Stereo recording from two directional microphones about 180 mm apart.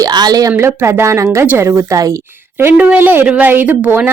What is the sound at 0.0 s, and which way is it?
A woman's voice, 20° right (ahead or behind).